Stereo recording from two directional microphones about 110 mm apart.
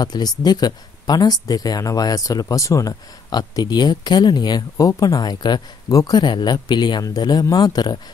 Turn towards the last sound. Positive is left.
turn(degrees=40)  # may be behind; listen again after turning